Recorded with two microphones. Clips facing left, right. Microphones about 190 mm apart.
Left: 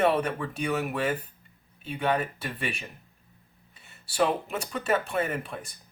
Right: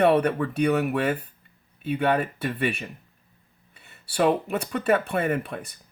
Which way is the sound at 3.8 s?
60° right (ahead or behind).